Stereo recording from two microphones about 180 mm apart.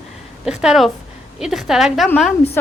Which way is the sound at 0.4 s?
5° right (ahead or behind).